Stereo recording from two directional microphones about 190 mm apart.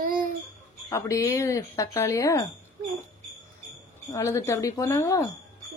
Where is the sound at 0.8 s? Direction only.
15° left (ahead or behind).